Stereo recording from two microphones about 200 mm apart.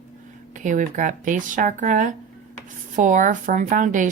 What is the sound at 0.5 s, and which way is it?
Speech, 40° right (ahead or behind).